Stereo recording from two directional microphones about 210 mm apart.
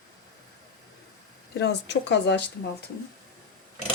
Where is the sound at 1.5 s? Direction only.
55° left (ahead or behind).